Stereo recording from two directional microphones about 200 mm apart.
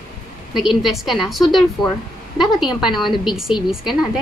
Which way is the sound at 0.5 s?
Centre (ahead or behind).